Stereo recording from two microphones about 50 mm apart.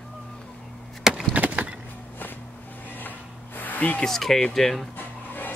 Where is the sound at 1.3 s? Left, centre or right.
Right.